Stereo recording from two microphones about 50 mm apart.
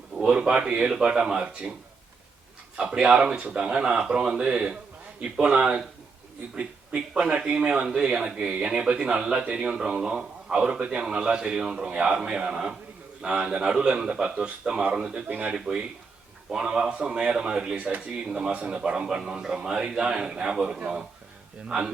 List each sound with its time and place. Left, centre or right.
0.3 s a man's voice: centre
2.7 s a man's voice: centre
7.3 s a man's voice: centre
15.5 s a man's voice: centre